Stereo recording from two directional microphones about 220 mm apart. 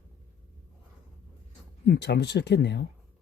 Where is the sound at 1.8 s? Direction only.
50° left (ahead or behind).